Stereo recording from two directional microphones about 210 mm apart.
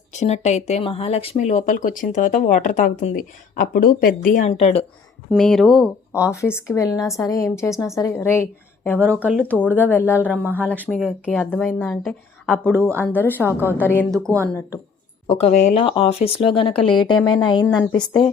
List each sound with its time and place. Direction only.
0.1 s speech: 35° left (ahead or behind)
5.3 s speech: centre (ahead or behind)
6.3 s a woman's voice: 10° left (ahead or behind)
9.1 s speech: 10° right (ahead or behind)
9.7 s a woman's voice: 10° left (ahead or behind)
14.2 s speech: 15° right (ahead or behind)
15.3 s speech: 30° left (ahead or behind)